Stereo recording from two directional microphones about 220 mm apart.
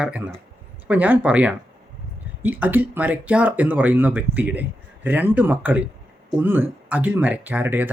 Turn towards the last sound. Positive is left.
turn(degrees=-10)  # may be behind; listen again after turning